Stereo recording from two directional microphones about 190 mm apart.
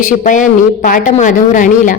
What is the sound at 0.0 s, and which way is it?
A woman's voice, 45° left (ahead or behind).